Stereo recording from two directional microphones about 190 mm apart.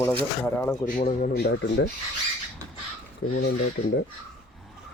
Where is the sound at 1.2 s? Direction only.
55° left (ahead or behind).